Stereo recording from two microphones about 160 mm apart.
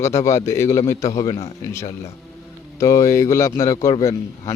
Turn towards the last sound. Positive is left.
turn(degrees=20)  # may be behind; listen again after turning